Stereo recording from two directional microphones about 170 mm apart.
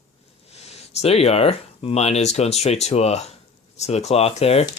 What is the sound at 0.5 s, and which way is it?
Speech, 35° left (ahead or behind).